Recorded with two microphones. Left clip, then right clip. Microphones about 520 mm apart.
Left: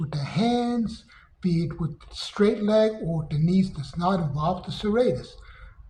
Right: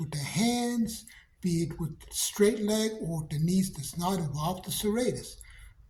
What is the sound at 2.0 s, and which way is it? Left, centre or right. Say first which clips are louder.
Speech: left 2 dB; right.